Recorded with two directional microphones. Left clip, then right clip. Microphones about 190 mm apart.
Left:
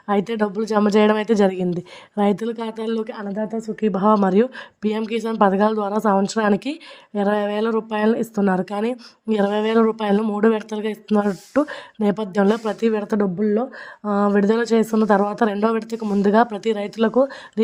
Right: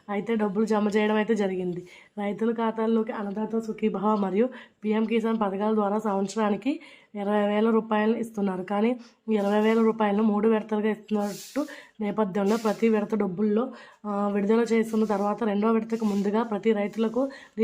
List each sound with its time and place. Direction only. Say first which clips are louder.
0.1 s a woman's voice: left 7 dB; 45° left (ahead or behind)